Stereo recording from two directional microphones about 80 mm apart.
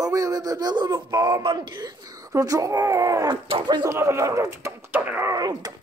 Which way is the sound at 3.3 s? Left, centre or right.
Right.